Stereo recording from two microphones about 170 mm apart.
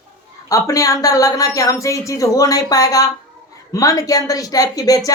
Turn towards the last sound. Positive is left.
turn(degrees=20)  # may be behind; listen again after turning